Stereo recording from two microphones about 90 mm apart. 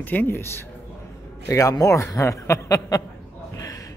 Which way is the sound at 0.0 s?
20° left (ahead or behind).